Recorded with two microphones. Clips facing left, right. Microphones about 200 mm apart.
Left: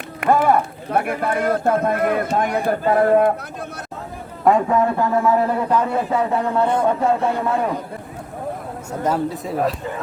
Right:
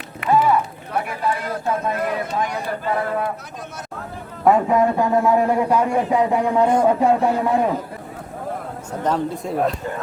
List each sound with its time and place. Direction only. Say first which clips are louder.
0.2 s speech: left 1 dB; 50° left (ahead or behind)
4.5 s speech: even; centre (ahead or behind)
4.8 s speech: right 1 dB; 15° right (ahead or behind)
8.9 s speech: left 1 dB; 10° left (ahead or behind)